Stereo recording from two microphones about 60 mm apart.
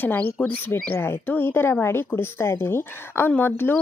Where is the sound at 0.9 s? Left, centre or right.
Left.